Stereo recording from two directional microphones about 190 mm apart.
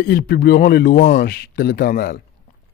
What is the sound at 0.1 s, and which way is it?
Speech, 55° left (ahead or behind).